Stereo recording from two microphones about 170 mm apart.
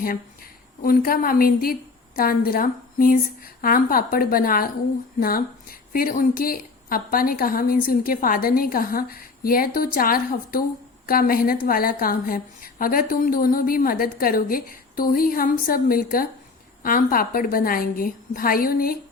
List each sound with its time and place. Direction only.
0.8 s a woman's voice: 55° left (ahead or behind)
5.9 s a woman's voice: 55° left (ahead or behind)